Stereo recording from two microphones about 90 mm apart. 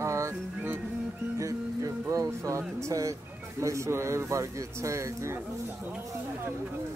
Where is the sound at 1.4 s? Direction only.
35° right (ahead or behind).